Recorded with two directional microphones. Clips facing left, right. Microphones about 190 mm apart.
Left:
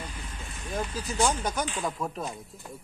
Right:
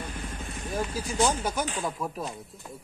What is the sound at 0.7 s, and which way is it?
Speech, 10° right (ahead or behind).